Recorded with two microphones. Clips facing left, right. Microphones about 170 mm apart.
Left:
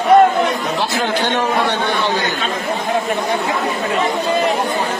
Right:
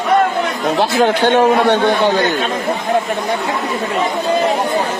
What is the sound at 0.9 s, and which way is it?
Speech, 50° right (ahead or behind).